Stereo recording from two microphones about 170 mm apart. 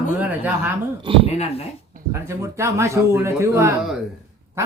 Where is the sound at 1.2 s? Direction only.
35° left (ahead or behind).